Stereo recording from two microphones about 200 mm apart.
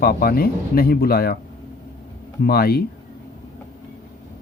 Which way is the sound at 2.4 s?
50° left (ahead or behind).